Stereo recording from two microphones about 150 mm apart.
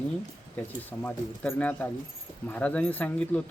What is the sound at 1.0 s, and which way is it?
Speech, 10° left (ahead or behind).